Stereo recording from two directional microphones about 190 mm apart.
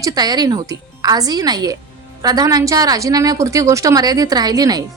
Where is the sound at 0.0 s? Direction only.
20° right (ahead or behind).